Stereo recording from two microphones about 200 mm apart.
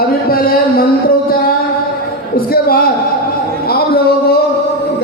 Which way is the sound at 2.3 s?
45° left (ahead or behind).